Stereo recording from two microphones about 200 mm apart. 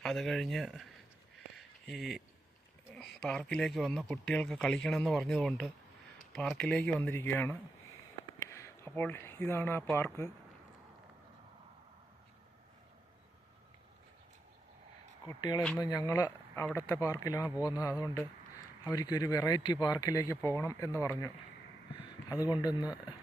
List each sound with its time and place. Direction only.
0.0 s speech: centre (ahead or behind)
1.5 s a sound: centre (ahead or behind)
2.9 s speech: 5° left (ahead or behind)
15.3 s speech: 20° left (ahead or behind)